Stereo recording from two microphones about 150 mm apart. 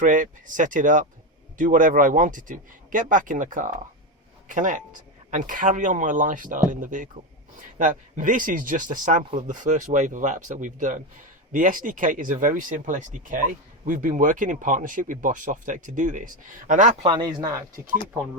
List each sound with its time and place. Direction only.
0.0 s speech: 60° right (ahead or behind)
17.0 s speech: 30° right (ahead or behind)